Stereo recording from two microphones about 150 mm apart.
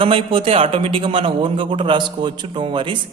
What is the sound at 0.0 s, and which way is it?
A man's voice, 35° right (ahead or behind).